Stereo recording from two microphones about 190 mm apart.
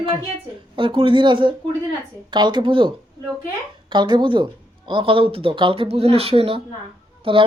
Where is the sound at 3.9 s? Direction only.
25° right (ahead or behind).